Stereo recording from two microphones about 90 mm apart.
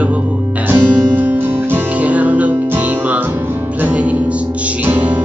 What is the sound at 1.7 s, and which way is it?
Music, 15° right (ahead or behind).